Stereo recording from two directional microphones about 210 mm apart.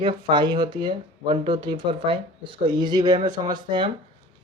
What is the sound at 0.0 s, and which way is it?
Speech, 20° right (ahead or behind).